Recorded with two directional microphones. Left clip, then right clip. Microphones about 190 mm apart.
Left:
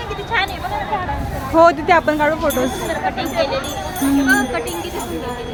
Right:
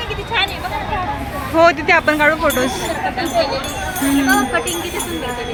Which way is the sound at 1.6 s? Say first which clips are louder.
Even; 20° left (ahead or behind).